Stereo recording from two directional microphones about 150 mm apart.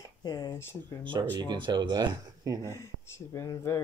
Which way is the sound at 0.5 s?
15° left (ahead or behind).